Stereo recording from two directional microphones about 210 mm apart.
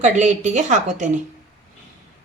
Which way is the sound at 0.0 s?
35° right (ahead or behind).